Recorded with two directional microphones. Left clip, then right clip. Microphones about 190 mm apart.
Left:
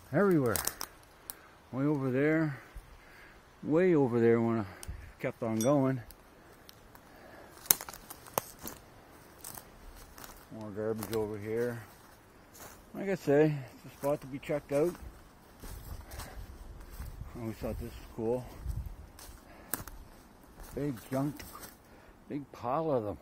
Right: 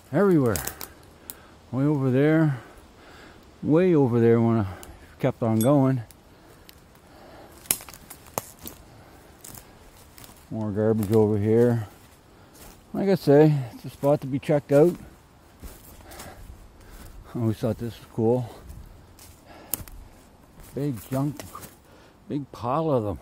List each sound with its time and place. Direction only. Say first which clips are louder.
0.1 s speech: right 7 dB; 10° right (ahead or behind)
0.5 s speech: right 6 dB; 5° left (ahead or behind); by 2.6 s 10° right (ahead or behind)
3.7 s a man's voice: right 7 dB; centre (ahead or behind)
10.7 s speech: right 12 dB; 25° right (ahead or behind)
12.9 s speech: right 10 dB; 20° right (ahead or behind)
17.4 s speech: right 12 dB; 25° right (ahead or behind)
20.7 s speech: right 6 dB; 5° right (ahead or behind)
22.3 s speech: right 7 dB; 20° right (ahead or behind)